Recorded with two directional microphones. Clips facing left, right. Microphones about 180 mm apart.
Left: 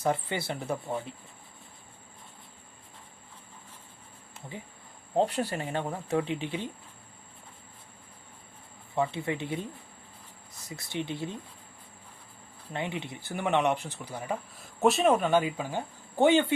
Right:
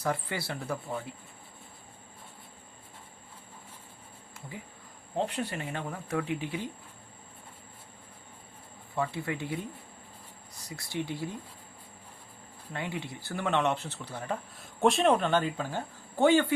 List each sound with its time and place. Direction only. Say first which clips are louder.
0.0 s speech: left 3 dB; 20° left (ahead or behind)
5.1 s speech: left 5 dB; 35° left (ahead or behind)
9.0 s speech: left 3 dB; 20° left (ahead or behind)
10.7 s speech: even; 20° left (ahead or behind)
12.7 s speech: left 2 dB; 20° left (ahead or behind)